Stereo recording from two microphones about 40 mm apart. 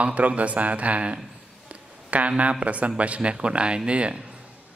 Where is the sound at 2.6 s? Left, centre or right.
Right.